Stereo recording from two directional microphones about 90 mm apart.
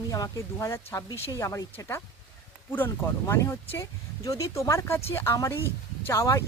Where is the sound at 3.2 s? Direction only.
35° left (ahead or behind).